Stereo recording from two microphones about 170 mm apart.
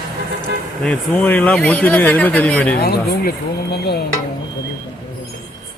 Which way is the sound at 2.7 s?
65° left (ahead or behind).